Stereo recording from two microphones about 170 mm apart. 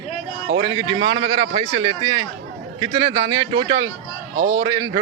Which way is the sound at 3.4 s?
25° right (ahead or behind).